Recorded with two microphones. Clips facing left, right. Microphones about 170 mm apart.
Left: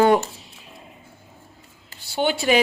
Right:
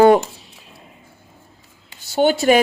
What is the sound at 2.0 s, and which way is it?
Speech, 45° right (ahead or behind).